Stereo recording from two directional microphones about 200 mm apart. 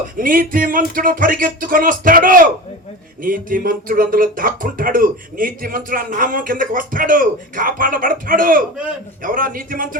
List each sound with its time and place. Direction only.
0.2 s speech: 45° right (ahead or behind)